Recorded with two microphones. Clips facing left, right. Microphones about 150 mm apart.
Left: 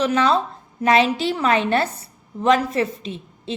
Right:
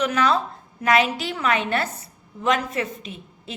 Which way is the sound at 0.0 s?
30° left (ahead or behind).